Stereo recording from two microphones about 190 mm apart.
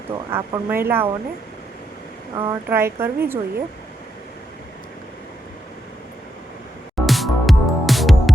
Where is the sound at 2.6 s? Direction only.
10° right (ahead or behind).